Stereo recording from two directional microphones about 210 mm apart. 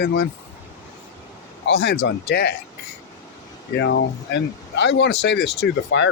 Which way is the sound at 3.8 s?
55° left (ahead or behind).